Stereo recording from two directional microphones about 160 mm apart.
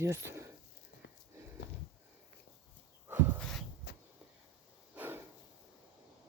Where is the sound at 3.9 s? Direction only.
90° left.